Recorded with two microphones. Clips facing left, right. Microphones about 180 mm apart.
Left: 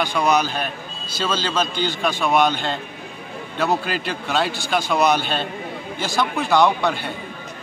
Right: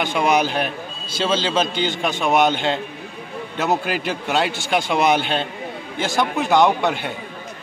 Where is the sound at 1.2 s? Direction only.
25° right (ahead or behind).